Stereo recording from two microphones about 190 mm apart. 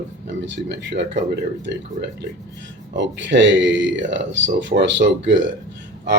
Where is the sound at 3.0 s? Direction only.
70° right (ahead or behind).